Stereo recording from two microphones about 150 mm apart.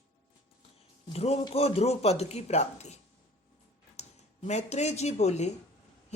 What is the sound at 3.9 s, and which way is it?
Speech, 50° left (ahead or behind).